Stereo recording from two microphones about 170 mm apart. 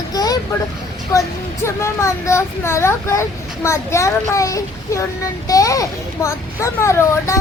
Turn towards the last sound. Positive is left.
turn(degrees=15)  # may be behind; listen again after turning